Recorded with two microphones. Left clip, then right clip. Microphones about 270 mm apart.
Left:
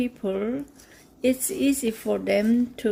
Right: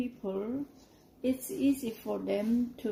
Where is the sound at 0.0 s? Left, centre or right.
Left.